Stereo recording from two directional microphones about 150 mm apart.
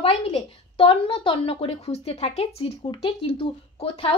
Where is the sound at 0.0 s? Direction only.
40° left (ahead or behind).